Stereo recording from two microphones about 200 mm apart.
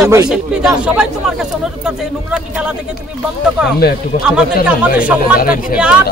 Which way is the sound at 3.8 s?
50° left (ahead or behind).